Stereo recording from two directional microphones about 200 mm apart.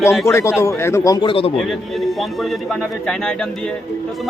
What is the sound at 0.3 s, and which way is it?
Speech, 15° left (ahead or behind).